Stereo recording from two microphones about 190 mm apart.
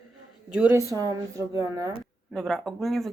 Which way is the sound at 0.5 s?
10° right (ahead or behind).